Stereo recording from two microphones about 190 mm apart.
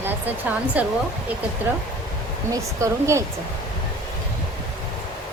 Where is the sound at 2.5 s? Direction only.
15° right (ahead or behind).